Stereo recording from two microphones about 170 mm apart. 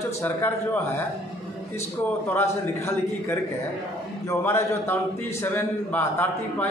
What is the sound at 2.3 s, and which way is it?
A man's voice, 15° left (ahead or behind).